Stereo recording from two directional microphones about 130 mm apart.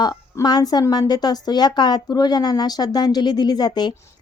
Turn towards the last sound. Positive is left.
turn(degrees=35)  # may be behind; listen again after turning